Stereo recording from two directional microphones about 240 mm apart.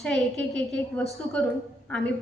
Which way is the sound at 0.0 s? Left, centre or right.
Centre.